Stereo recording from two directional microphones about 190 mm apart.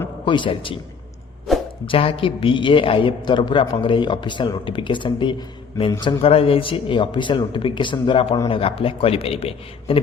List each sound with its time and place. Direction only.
0.3 s a man's voice: 25° left (ahead or behind)
1.5 s music: centre (ahead or behind)
1.9 s a man's voice: 30° left (ahead or behind)